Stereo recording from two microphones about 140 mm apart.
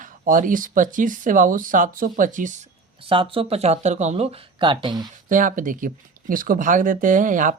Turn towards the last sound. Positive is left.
turn(degrees=-70)  # may be behind; listen again after turning